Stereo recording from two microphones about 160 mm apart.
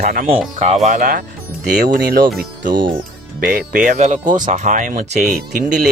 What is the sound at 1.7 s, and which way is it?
Speech, 70° right (ahead or behind).